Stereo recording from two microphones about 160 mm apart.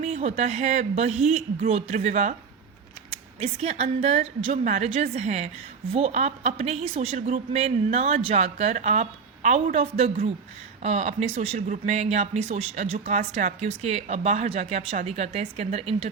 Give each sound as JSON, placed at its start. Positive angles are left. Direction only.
{"t": 0.0, "sound": "speech", "side_deg": -45}